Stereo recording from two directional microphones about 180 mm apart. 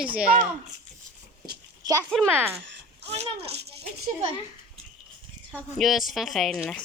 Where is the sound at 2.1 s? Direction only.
10° right (ahead or behind).